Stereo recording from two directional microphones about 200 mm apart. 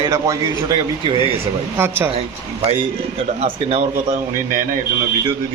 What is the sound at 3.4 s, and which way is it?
Speech, 30° right (ahead or behind).